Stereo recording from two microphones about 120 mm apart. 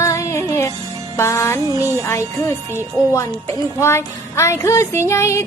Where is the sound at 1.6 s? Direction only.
25° right (ahead or behind).